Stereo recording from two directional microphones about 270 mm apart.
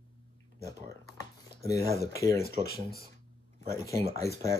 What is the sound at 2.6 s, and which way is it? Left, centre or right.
Speech, right.